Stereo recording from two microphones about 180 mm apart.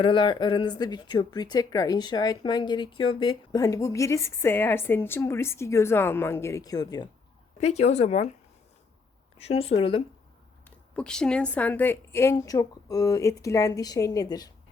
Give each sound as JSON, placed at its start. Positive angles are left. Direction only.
{"t": 0.0, "sound": "speech", "side_deg": 25}
{"t": 7.6, "sound": "speech", "side_deg": 35}
{"t": 9.4, "sound": "speech", "side_deg": 35}
{"t": 10.9, "sound": "a woman's voice", "side_deg": 5}